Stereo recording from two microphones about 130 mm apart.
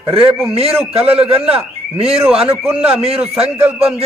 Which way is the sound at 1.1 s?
45° right (ahead or behind).